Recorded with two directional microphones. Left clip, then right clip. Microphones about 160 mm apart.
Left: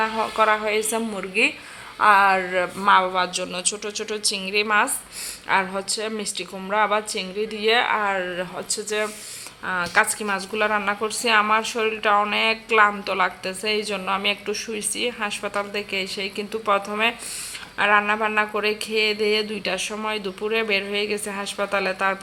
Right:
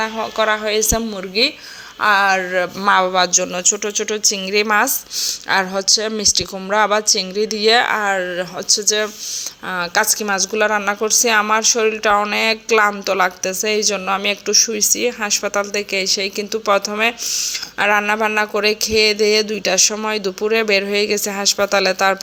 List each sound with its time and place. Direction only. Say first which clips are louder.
0.0 s speech: right 2 dB; 25° right (ahead or behind)
2.9 s speech: right 4 dB; 45° right (ahead or behind)
7.9 s speech: right 5 dB; 30° right (ahead or behind)
8.7 s speech: right 9 dB; 45° right (ahead or behind)
9.6 s speech: right 3 dB; 35° right (ahead or behind)